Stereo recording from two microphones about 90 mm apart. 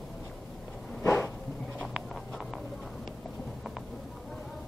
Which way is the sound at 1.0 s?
25° left (ahead or behind).